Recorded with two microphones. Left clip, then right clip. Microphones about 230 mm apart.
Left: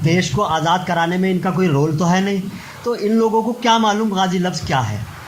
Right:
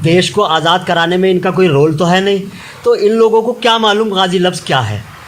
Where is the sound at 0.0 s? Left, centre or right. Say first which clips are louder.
Right 7 dB; right.